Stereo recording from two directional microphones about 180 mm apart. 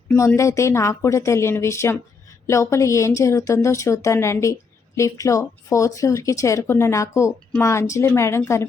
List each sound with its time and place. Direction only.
0.2 s speech: 15° left (ahead or behind)